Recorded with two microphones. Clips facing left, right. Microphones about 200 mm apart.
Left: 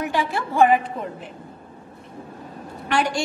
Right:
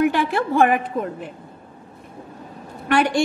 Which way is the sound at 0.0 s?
60° right (ahead or behind).